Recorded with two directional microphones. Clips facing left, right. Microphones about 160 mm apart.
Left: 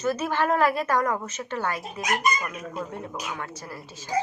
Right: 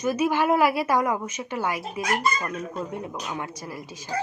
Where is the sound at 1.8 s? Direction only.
15° left (ahead or behind).